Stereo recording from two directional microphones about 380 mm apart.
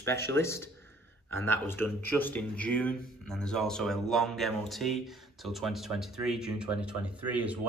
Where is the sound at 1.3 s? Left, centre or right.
Right.